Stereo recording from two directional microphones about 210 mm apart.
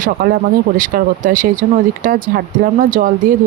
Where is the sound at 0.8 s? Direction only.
40° right (ahead or behind).